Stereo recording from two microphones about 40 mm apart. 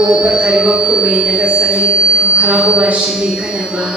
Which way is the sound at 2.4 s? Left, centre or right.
Right.